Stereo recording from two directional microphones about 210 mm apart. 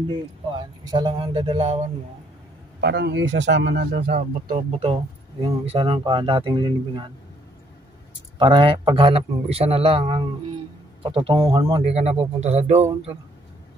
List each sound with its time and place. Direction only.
0.8 s a man's voice: 20° right (ahead or behind)
2.8 s a man's voice: 55° right (ahead or behind); by 7.1 s 20° right (ahead or behind)
8.4 s a man's voice: 20° right (ahead or behind)